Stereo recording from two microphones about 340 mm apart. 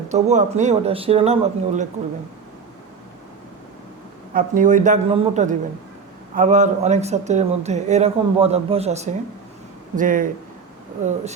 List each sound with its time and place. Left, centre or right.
0.1 s speech: right
4.4 s speech: right